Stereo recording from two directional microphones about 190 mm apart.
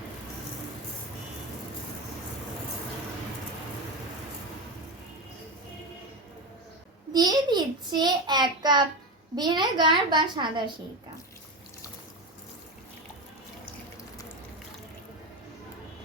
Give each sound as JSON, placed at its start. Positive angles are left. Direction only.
{"t": 7.1, "sound": "a child's voice", "side_deg": -20}